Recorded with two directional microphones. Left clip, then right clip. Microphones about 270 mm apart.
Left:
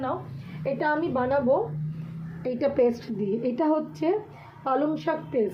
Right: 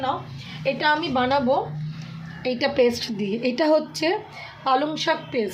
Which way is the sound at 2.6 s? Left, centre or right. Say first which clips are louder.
Right 3 dB; right.